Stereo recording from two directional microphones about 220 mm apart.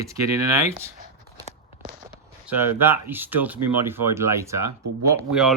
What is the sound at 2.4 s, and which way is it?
Speech, 10° right (ahead or behind).